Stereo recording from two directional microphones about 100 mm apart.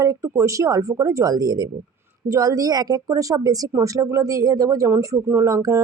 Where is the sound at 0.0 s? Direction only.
30° right (ahead or behind).